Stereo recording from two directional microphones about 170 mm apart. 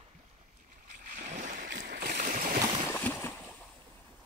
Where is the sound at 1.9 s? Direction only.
50° right (ahead or behind).